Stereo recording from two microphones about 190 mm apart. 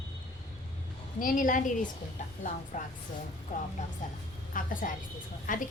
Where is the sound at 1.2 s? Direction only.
45° left (ahead or behind).